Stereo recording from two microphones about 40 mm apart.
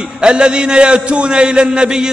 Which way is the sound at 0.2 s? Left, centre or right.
Right.